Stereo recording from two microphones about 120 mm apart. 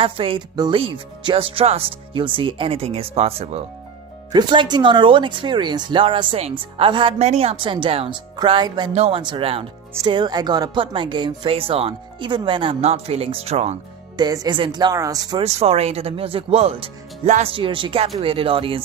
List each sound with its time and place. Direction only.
0.0 s speech: 50° right (ahead or behind)
4.3 s speech: 40° right (ahead or behind)
8.9 s speech: 60° right (ahead or behind)
9.2 s speech: 45° right (ahead or behind)
10.0 s speech: 35° right (ahead or behind)
12.8 s speech: 60° right (ahead or behind)
14.1 s speech: 35° right (ahead or behind)
15.4 s speech: 60° right (ahead or behind)